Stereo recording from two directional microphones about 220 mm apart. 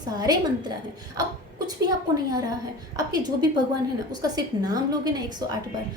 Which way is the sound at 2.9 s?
20° right (ahead or behind).